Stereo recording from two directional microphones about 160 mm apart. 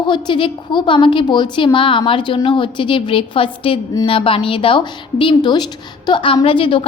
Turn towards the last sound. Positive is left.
turn(degrees=35)  # may be behind; listen again after turning